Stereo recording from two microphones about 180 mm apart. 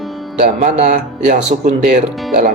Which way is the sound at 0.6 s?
45° right (ahead or behind).